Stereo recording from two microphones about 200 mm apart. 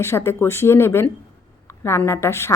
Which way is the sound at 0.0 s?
15° left (ahead or behind).